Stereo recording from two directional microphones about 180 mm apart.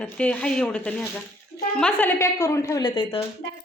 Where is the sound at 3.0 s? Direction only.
30° left (ahead or behind).